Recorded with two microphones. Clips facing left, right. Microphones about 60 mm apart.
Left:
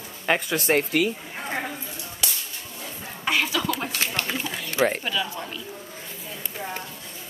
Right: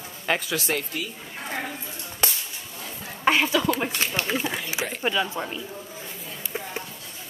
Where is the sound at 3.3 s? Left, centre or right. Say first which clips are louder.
Right 3 dB; right.